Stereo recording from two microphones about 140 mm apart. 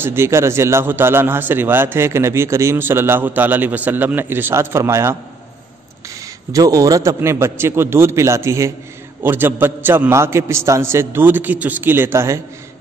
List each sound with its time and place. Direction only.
0.0 s a man's voice: 15° right (ahead or behind)